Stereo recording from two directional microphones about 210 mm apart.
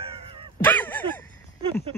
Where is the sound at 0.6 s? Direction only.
10° left (ahead or behind).